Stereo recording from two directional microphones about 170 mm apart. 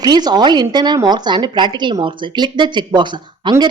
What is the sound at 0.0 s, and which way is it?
A woman's voice, 25° right (ahead or behind).